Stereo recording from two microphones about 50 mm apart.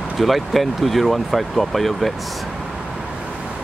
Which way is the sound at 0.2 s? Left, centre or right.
Centre.